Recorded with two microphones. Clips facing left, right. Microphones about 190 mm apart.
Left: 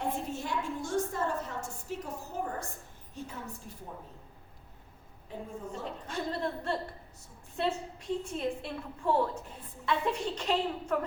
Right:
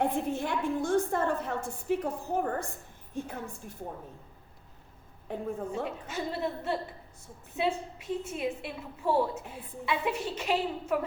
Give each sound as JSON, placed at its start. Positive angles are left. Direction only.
{"t": 0.0, "sound": "a sound", "side_deg": -55}
{"t": 3.7, "sound": "a woman's voice", "side_deg": -55}
{"t": 5.3, "sound": "a woman's voice", "side_deg": -55}
{"t": 5.8, "sound": "a woman's voice", "side_deg": -5}